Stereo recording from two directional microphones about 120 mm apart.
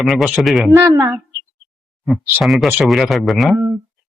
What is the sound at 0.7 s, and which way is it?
Speech, 35° right (ahead or behind).